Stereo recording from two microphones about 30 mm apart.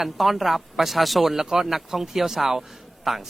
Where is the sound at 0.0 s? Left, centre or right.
Centre.